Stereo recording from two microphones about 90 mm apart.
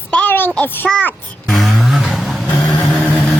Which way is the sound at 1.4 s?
Centre (ahead or behind).